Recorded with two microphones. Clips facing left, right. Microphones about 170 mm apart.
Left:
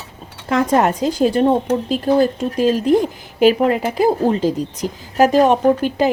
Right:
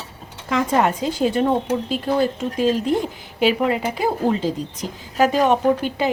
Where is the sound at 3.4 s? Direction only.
45° left (ahead or behind).